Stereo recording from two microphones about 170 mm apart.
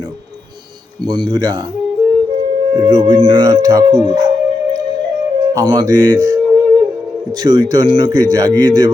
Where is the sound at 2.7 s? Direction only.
20° right (ahead or behind).